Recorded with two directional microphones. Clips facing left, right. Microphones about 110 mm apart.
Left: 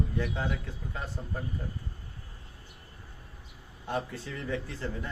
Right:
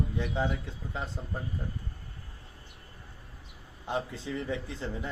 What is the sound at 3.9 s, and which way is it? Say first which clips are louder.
A man's voice: right 1 dB; 20° right (ahead or behind).